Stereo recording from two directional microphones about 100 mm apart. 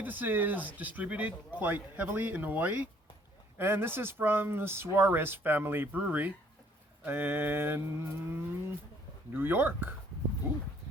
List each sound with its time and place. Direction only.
0.0 s a man's voice: 20° right (ahead or behind)